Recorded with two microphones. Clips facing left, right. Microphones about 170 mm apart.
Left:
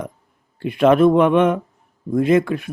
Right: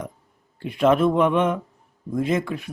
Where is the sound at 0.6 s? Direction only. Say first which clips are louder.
Left 5 dB; 65° left (ahead or behind).